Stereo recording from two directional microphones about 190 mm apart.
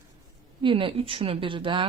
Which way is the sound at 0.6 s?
25° right (ahead or behind).